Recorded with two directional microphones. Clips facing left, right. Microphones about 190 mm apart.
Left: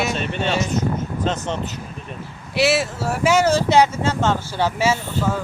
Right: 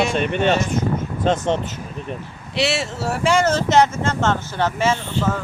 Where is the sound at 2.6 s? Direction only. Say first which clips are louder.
Left 3 dB; centre (ahead or behind).